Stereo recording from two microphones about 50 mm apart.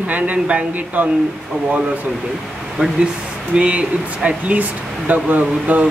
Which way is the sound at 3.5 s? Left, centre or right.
Right.